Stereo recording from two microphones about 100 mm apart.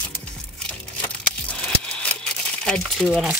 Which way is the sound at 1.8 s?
10° left (ahead or behind).